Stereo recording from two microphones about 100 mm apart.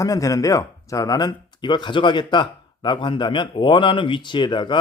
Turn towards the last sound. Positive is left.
turn(degrees=50)  # may be behind; listen again after turning